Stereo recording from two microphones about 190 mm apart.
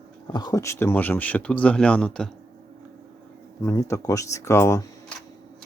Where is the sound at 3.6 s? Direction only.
15° left (ahead or behind).